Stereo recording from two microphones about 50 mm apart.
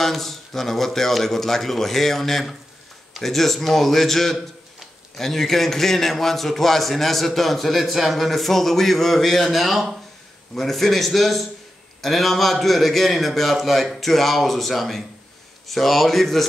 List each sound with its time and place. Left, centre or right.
0.0 s a man's voice: centre